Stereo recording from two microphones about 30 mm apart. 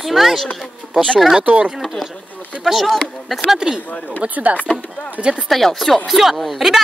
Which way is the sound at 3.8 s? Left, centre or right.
Left.